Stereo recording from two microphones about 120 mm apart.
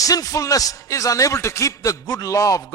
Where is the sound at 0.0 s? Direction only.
30° left (ahead or behind).